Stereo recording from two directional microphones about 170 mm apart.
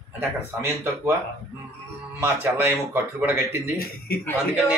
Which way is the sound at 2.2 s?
15° right (ahead or behind).